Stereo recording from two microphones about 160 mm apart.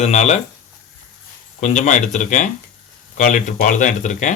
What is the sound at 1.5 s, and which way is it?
Speech, 50° left (ahead or behind).